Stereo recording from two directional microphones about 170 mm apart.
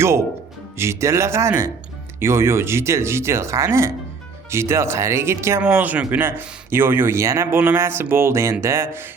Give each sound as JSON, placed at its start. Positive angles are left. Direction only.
{"t": 0.8, "sound": "speech", "side_deg": -15}